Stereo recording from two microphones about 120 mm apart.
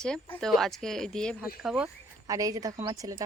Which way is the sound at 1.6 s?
5° right (ahead or behind).